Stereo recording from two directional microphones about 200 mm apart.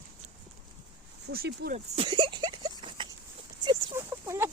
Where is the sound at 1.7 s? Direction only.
30° right (ahead or behind).